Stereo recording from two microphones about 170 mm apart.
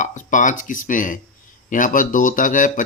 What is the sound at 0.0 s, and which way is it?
Speech, 45° left (ahead or behind).